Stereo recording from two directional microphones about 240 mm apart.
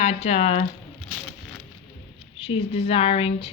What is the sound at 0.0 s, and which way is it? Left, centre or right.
Speech, left.